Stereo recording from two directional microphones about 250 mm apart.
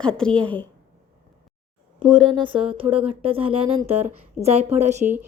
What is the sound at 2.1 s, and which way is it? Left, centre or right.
Speech, centre.